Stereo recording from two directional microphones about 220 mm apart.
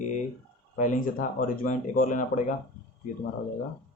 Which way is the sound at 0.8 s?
35° left (ahead or behind).